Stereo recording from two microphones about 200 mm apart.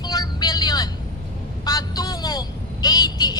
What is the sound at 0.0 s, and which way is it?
Vehicle, 20° left (ahead or behind).